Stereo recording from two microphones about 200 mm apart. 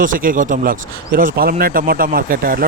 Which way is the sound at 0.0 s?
45° right (ahead or behind).